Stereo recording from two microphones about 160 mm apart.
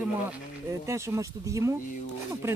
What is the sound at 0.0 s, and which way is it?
Speech, 15° right (ahead or behind).